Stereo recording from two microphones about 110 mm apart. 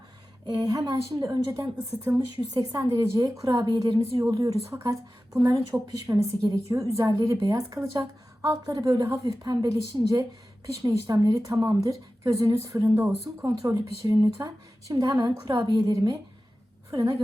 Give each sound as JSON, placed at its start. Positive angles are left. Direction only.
{"t": 0.4, "sound": "a woman's voice", "side_deg": -40}